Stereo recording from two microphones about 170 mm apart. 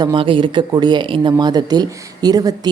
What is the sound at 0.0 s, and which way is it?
Speech, 30° right (ahead or behind).